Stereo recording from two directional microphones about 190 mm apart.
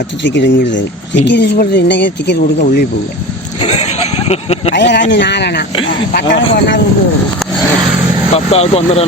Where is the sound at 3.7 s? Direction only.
35° left (ahead or behind).